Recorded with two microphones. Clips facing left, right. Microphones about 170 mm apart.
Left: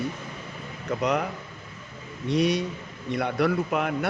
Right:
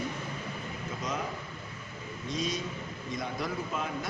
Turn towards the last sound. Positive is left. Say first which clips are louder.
# left 8 dB
turn(degrees=70)  # may be behind; listen again after turning